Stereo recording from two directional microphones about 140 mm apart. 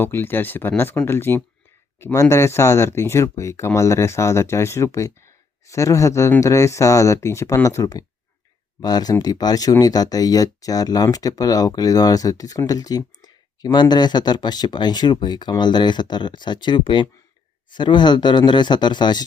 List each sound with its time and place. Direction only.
0.0 s speech: 15° left (ahead or behind); by 19.2 s 30° left (ahead or behind)